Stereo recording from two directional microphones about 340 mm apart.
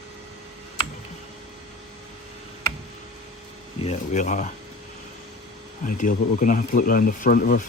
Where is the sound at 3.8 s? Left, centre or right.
Left.